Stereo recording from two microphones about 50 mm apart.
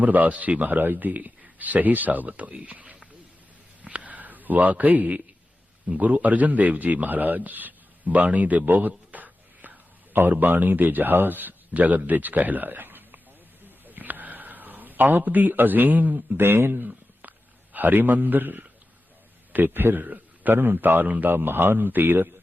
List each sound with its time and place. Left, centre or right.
0.0 s speech: right
3.8 s a sound: right
5.9 s speech: right
9.1 s whispering: right
10.3 s speech: right
13.7 s a sound: right
16.4 s a man's voice: right